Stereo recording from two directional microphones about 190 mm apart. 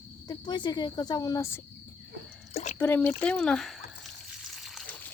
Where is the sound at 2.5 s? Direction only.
35° left (ahead or behind).